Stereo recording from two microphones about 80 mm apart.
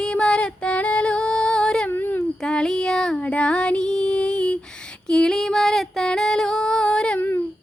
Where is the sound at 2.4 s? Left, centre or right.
Centre.